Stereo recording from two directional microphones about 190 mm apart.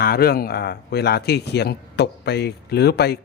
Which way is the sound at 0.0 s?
55° left (ahead or behind).